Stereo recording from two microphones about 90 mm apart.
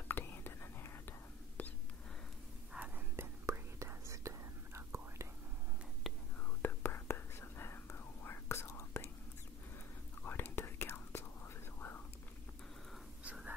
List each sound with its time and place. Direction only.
0.1 s whispering: 25° left (ahead or behind)
3.2 s whispering: 30° right (ahead or behind)
6.0 s whispering: centre (ahead or behind)
6.6 s whispering: 25° left (ahead or behind)
10.2 s whispering: 25° left (ahead or behind)
13.2 s whispering: 15° right (ahead or behind)